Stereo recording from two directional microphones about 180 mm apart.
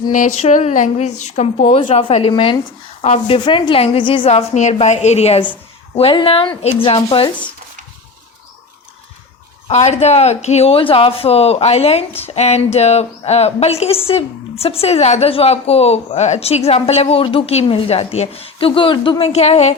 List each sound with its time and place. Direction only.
0.1 s a woman's voice: 45° left (ahead or behind); by 7.3 s 30° left (ahead or behind)
9.6 s a woman's voice: 35° left (ahead or behind)